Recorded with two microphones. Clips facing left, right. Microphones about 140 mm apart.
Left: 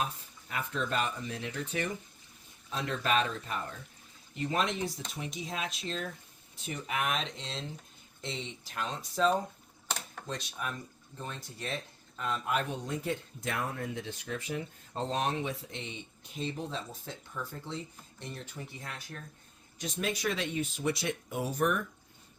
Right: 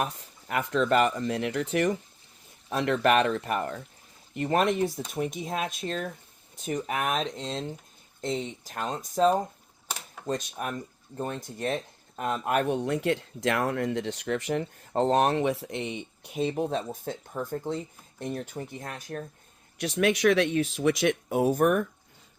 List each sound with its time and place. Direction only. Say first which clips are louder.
0.0 s speech: right 5 dB; 70° right (ahead or behind)
2.6 s speech: right 8 dB; 65° right (ahead or behind)
4.4 s speech: right 7 dB; 55° right (ahead or behind)
19.8 s speech: right 10 dB; 75° right (ahead or behind); by 21.8 s 50° right (ahead or behind)